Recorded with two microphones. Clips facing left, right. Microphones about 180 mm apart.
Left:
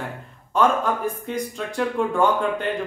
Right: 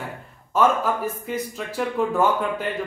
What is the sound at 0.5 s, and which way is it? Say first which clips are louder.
Speech: even; 5° right (ahead or behind).